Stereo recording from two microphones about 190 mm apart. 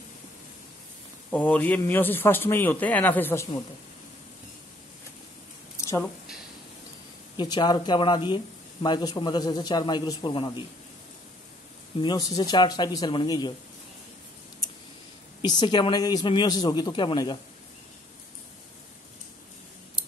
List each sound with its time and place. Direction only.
1.3 s speech: 10° left (ahead or behind)
5.8 s a sound: 15° left (ahead or behind)
7.3 s speech: 20° left (ahead or behind)
12.0 s speech: 20° left (ahead or behind)
15.4 s speech: 25° left (ahead or behind)